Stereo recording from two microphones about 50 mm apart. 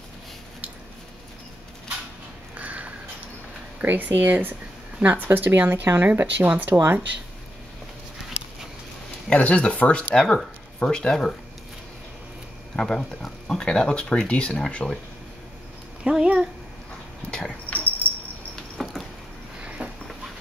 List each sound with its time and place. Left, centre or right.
2.5 s a sound: right
3.8 s speech: right
9.3 s speech: left
10.1 s speech: centre
12.7 s speech: centre
16.0 s speech: right
17.3 s dog: centre
17.6 s dog: left
18.8 s a sound: centre
19.8 s a sound: right